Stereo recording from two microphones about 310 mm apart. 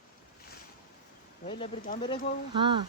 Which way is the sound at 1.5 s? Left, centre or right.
Left.